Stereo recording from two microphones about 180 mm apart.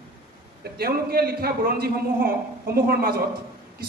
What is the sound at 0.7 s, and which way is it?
A man's voice, 60° right (ahead or behind).